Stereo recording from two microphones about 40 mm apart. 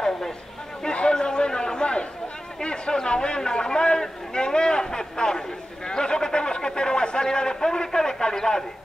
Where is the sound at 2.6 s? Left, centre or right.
Left.